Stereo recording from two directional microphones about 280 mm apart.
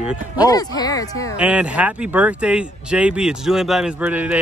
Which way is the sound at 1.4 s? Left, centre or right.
Centre.